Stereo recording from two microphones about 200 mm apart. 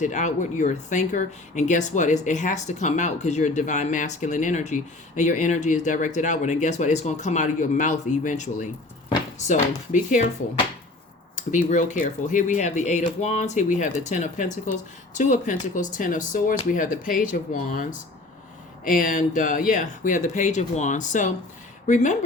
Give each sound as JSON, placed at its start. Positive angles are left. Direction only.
{"t": 0.0, "sound": "speech", "side_deg": 35}
{"t": 18.9, "sound": "speech", "side_deg": 45}